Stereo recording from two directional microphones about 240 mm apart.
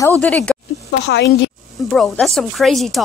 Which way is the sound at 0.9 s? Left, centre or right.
Left.